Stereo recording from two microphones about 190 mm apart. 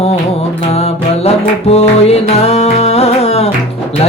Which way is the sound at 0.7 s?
30° left (ahead or behind).